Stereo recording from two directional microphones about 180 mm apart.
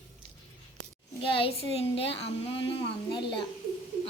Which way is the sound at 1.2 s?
30° left (ahead or behind).